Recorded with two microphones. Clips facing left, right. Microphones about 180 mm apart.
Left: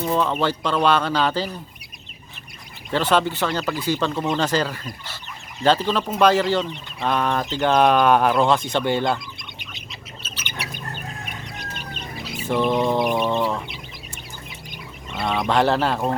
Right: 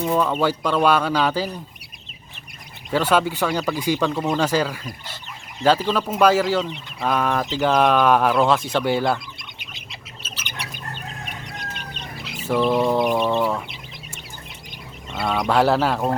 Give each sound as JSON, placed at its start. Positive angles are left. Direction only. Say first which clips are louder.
{"t": 0.0, "sound": "speech", "louder": "right 1 dB", "side_deg": -5}
{"t": 2.9, "sound": "speech", "louder": "right 1 dB", "side_deg": -10}
{"t": 10.2, "sound": "bird", "louder": "left 1 dB", "side_deg": 0}
{"t": 12.7, "sound": "speech", "louder": "right 1 dB", "side_deg": 0}
{"t": 15.1, "sound": "speech", "louder": "right 1 dB", "side_deg": -5}